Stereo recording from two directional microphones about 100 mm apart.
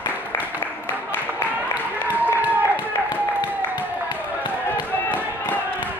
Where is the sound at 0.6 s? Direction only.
20° left (ahead or behind).